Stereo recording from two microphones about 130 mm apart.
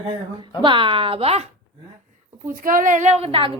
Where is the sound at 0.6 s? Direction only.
40° right (ahead or behind).